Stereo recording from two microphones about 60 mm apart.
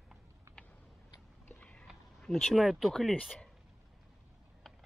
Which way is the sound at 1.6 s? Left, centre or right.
Left.